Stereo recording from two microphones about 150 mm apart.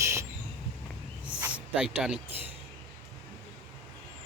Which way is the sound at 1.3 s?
10° right (ahead or behind).